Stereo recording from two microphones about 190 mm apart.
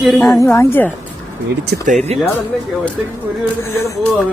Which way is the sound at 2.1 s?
35° right (ahead or behind).